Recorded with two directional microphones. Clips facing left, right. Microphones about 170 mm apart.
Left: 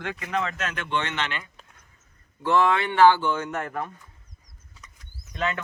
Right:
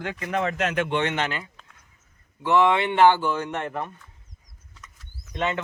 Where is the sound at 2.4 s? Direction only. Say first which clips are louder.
Right 2 dB; 20° right (ahead or behind).